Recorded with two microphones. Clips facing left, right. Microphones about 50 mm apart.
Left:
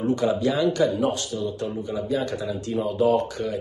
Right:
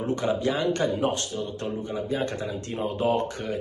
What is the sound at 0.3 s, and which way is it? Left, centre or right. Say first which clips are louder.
Speech: left 3 dB; right.